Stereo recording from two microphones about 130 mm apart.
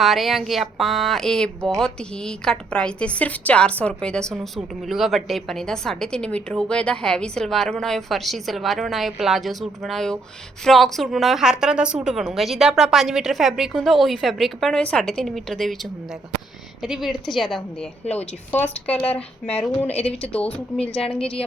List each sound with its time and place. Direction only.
0.0 s speech: centre (ahead or behind)
18.0 s a woman's voice: 55° left (ahead or behind)
18.9 s speech: 10° left (ahead or behind)
19.9 s a woman's voice: 50° left (ahead or behind)